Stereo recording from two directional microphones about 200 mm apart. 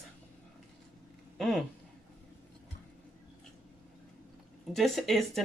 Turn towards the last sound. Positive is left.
turn(degrees=0)  # may be behind; listen again after turning